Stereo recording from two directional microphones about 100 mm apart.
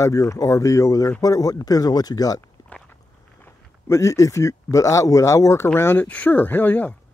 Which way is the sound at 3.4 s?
30° left (ahead or behind).